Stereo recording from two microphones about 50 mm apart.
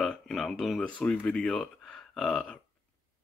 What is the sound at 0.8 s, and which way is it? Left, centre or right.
Speech, left.